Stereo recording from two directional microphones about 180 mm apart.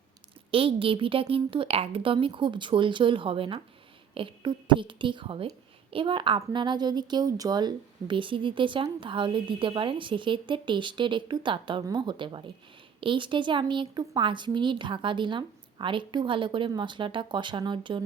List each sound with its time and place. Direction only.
0.5 s a woman's voice: 30° right (ahead or behind)